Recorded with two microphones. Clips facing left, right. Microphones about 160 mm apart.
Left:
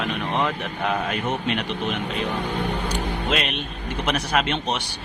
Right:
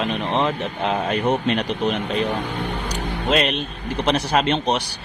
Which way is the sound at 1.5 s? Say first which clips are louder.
Right 4 dB; 35° right (ahead or behind).